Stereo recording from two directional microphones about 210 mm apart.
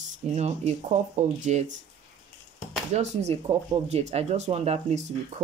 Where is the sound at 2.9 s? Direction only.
30° right (ahead or behind).